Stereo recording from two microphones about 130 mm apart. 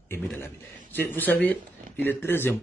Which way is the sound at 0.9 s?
15° left (ahead or behind).